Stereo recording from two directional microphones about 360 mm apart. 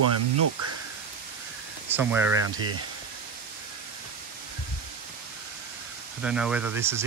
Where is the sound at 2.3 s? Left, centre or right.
Right.